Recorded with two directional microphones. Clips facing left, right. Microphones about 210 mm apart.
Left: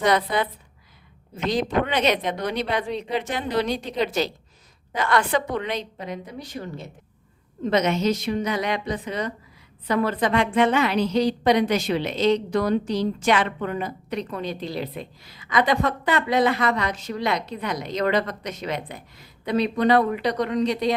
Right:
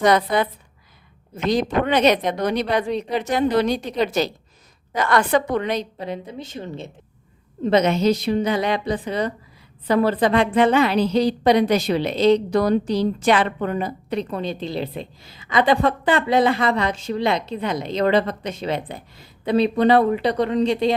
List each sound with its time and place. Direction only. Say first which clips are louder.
0.0 s a woman's voice: right 4 dB; 45° right (ahead or behind)
1.5 s a woman's voice: right 3 dB; 45° right (ahead or behind)
6.3 s a woman's voice: right 2 dB; 25° right (ahead or behind)